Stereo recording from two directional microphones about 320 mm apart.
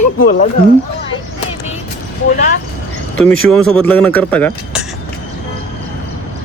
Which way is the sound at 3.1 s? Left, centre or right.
Centre.